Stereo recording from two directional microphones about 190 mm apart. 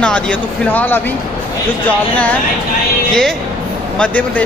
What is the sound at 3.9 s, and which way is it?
Speech, 5° left (ahead or behind).